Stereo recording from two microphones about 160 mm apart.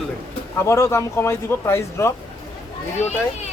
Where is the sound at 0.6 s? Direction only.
15° left (ahead or behind).